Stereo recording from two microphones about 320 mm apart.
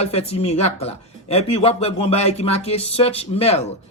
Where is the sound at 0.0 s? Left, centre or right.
Centre.